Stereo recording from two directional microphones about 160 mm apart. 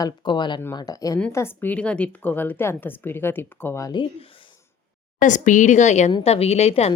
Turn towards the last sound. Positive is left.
turn(degrees=40)  # may be behind; listen again after turning